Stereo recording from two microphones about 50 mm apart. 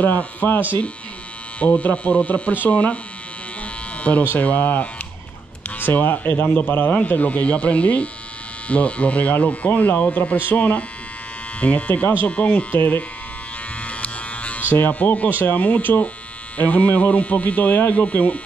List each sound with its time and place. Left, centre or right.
0.0 s speech: left
1.6 s speech: left
3.9 s electric shaver: left
4.3 s speech: left
12.7 s speech: left
13.7 s electric shaver: left
14.7 s speech: left